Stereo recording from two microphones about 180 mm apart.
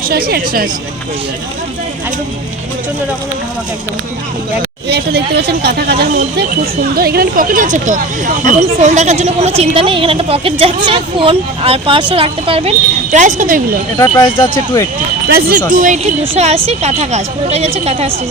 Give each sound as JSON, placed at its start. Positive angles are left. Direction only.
{"t": 0.1, "sound": "a woman's voice", "side_deg": -60}
{"t": 4.9, "sound": "a woman's voice", "side_deg": -65}
{"t": 14.0, "sound": "speech", "side_deg": 25}
{"t": 15.3, "sound": "a woman's voice", "side_deg": -55}
{"t": 15.7, "sound": "a woman's voice", "side_deg": -45}